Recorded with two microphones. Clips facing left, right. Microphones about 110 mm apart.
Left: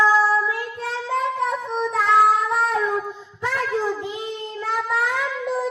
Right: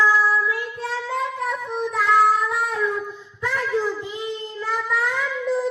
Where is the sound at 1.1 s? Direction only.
30° left (ahead or behind).